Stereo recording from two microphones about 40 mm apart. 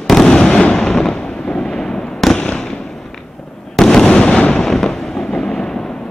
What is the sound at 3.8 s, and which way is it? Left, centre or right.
Fireworks, centre.